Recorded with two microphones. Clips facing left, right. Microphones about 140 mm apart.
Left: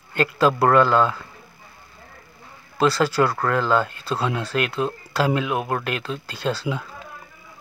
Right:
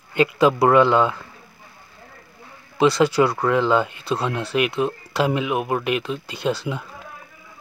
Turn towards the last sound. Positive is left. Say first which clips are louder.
# right 1 dB
turn(degrees=-15)  # may be behind; listen again after turning